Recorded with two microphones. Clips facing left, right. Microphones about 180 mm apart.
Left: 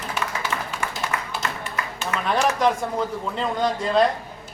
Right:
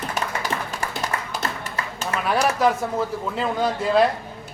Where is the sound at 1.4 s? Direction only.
35° right (ahead or behind).